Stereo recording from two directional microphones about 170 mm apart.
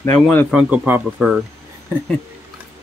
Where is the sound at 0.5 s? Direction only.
10° right (ahead or behind).